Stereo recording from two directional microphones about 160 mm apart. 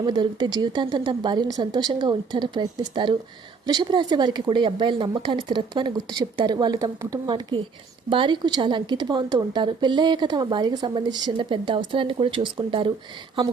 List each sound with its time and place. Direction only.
0.0 s speech: 30° right (ahead or behind)